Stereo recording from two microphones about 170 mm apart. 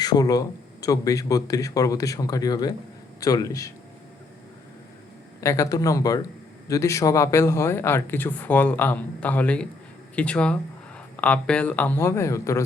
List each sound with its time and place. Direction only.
0.0 s speech: 25° left (ahead or behind)
5.4 s speech: 15° left (ahead or behind)